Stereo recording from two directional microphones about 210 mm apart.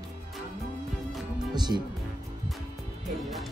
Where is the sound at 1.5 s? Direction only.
20° right (ahead or behind).